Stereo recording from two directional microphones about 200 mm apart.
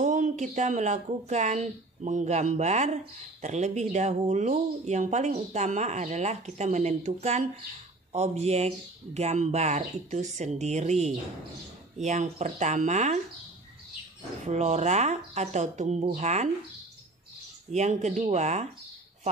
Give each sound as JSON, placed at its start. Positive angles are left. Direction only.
{"t": 0.0, "sound": "speech", "side_deg": -40}
{"t": 14.4, "sound": "speech", "side_deg": -35}
{"t": 17.7, "sound": "speech", "side_deg": -35}